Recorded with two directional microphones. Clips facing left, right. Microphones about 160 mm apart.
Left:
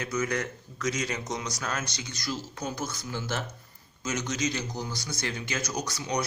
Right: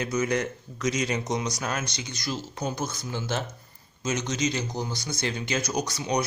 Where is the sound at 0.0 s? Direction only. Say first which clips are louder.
Right 4 dB; 20° right (ahead or behind).